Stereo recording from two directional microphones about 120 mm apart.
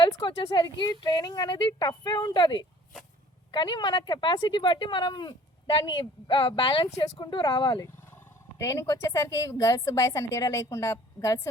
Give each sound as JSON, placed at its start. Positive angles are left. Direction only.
{"t": 0.0, "sound": "speech", "side_deg": 40}
{"t": 6.8, "sound": "speech", "side_deg": 35}
{"t": 8.1, "sound": "speech", "side_deg": 25}